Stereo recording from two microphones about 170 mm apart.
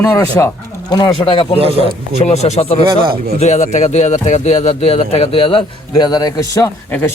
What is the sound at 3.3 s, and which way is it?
Speech, 40° left (ahead or behind).